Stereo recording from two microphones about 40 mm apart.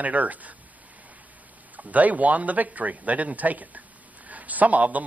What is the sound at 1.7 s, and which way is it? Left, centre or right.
A man's voice, right.